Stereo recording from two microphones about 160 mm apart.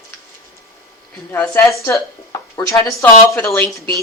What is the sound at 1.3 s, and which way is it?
Speech, 15° left (ahead or behind).